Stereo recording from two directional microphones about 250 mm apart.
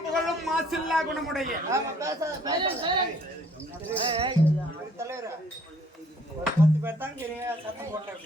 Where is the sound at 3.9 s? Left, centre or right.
Centre.